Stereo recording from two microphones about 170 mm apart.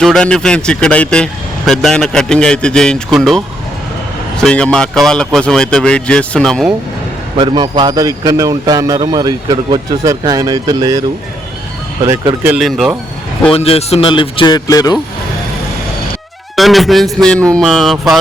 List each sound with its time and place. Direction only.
0.0 s speech: 5° left (ahead or behind)
7.3 s a man's voice: 25° right (ahead or behind)
12.4 s speech: 10° right (ahead or behind)
13.5 s speech: 35° left (ahead or behind)
16.6 s speech: centre (ahead or behind)